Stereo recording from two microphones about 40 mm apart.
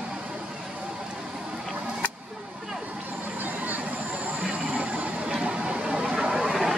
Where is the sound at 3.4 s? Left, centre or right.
Right.